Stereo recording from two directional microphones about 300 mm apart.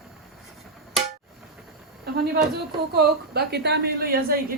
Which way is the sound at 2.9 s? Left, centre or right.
Right.